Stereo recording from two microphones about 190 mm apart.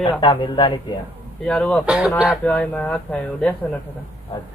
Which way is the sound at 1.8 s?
5° right (ahead or behind).